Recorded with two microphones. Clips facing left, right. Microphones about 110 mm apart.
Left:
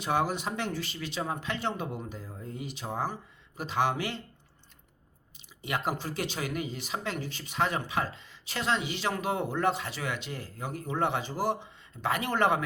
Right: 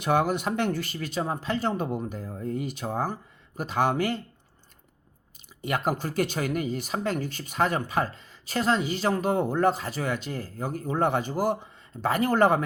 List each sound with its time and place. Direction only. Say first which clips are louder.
0.0 s speech: right 5 dB; 55° right (ahead or behind)
5.6 s speech: right 5 dB; 50° right (ahead or behind)